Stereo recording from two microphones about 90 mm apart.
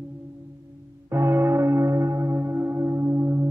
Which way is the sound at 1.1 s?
25° right (ahead or behind).